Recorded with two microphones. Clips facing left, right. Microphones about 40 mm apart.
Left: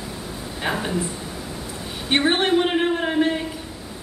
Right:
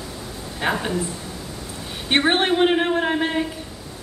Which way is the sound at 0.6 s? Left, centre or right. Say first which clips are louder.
Right 3 dB; centre.